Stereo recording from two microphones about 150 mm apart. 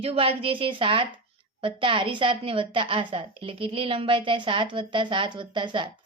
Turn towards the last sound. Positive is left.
turn(degrees=-30)  # may be behind; listen again after turning